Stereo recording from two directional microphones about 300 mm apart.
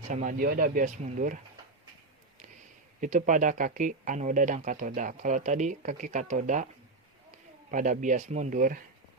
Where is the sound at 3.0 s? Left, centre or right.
Right.